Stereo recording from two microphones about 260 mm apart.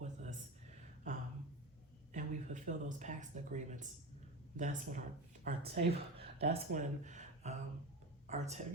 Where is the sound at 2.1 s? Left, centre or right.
Right.